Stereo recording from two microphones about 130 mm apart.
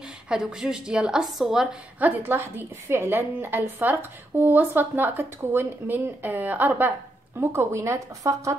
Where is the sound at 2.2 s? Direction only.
15° right (ahead or behind).